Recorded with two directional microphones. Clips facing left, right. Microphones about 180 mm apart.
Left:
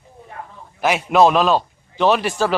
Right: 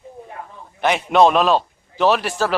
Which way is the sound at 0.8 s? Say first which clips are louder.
Even; centre (ahead or behind).